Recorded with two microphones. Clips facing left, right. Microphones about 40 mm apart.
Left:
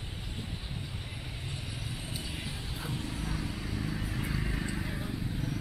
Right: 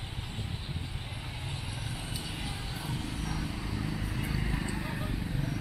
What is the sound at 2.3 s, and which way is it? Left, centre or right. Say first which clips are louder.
Music: right 1 dB; centre.